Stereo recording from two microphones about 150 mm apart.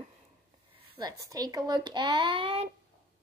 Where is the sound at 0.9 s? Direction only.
25° right (ahead or behind).